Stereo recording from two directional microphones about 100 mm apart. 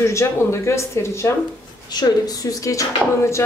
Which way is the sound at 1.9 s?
40° left (ahead or behind).